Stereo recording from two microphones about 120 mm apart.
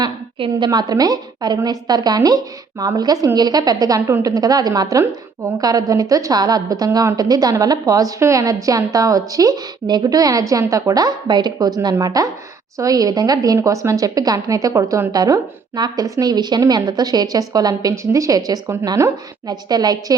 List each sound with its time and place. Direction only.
0.0 s a woman's voice: 45° right (ahead or behind)